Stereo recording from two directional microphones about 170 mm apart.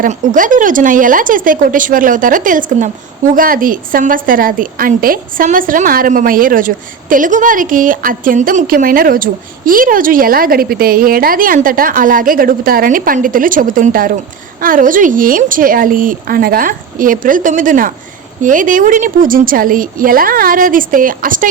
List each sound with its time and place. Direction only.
0.0 s a woman's voice: 50° right (ahead or behind)